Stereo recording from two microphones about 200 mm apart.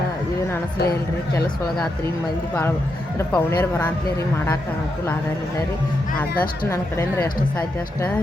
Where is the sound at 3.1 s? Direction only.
10° left (ahead or behind).